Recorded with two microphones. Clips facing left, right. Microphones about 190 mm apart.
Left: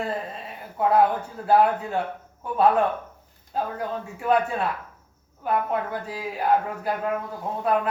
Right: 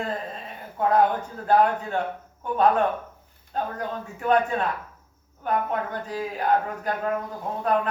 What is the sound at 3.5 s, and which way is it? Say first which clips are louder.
A man's voice: left 1 dB; 5° left (ahead or behind).